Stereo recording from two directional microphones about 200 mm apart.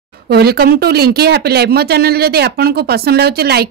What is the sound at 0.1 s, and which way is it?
Speech, 50° right (ahead or behind).